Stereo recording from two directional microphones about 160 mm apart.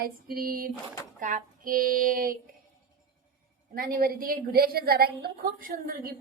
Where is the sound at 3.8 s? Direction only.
70° right (ahead or behind).